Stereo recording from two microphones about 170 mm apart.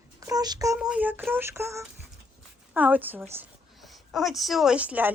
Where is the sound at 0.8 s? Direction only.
5° right (ahead or behind).